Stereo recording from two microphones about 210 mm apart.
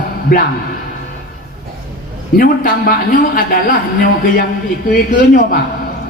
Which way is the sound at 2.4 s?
45° left (ahead or behind).